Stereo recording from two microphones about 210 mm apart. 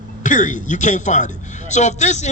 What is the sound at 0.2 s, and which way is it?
A man's voice, 35° left (ahead or behind).